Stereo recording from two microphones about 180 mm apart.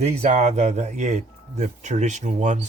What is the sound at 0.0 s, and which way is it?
Speech, 40° right (ahead or behind).